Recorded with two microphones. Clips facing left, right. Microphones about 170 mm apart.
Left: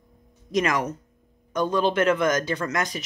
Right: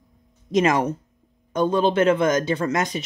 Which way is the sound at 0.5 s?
25° right (ahead or behind).